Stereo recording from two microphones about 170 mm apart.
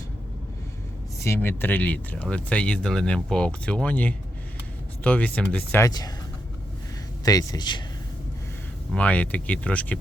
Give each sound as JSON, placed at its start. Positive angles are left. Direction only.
{"t": 1.2, "sound": "speech", "side_deg": 15}
{"t": 5.8, "sound": "speech", "side_deg": 25}
{"t": 7.3, "sound": "speech", "side_deg": 25}
{"t": 8.9, "sound": "speech", "side_deg": 5}